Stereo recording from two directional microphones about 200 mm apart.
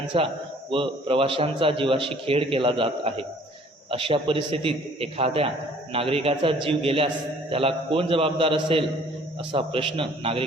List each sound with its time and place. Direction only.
0.1 s a man's voice: 25° right (ahead or behind)